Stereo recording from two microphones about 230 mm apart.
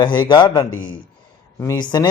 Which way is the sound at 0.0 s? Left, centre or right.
Centre.